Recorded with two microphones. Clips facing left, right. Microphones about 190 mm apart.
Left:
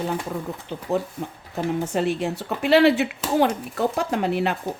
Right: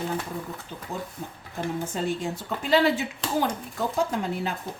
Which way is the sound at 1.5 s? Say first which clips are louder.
Left 6 dB; 70° left (ahead or behind).